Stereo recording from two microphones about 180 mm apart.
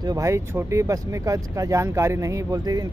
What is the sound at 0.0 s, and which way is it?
Speech, 20° right (ahead or behind).